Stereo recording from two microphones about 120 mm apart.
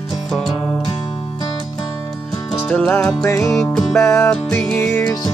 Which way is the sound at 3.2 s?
25° left (ahead or behind).